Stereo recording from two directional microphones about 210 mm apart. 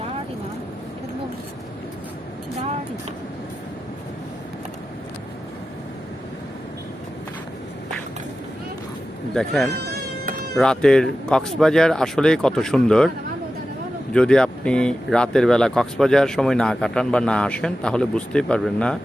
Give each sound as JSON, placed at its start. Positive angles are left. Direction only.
{"t": 9.3, "sound": "speech", "side_deg": 0}
{"t": 9.8, "sound": "insect", "side_deg": -50}
{"t": 10.5, "sound": "speech", "side_deg": 5}
{"t": 14.1, "sound": "speech", "side_deg": 5}